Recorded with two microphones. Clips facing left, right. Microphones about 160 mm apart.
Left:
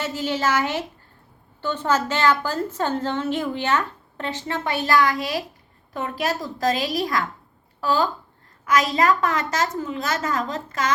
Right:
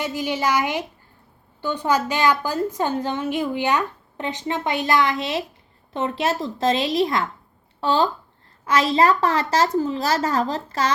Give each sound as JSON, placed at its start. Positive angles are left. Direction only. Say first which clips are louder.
{"t": 0.0, "sound": "a woman's voice", "louder": "right 1 dB", "side_deg": -15}